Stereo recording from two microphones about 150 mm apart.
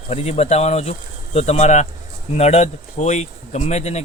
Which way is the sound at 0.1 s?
45° left (ahead or behind).